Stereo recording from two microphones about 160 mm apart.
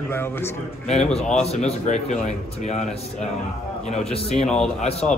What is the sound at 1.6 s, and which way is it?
Speech, 45° left (ahead or behind).